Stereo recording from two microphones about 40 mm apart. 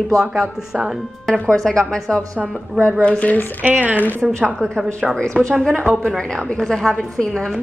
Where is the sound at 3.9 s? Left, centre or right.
Left.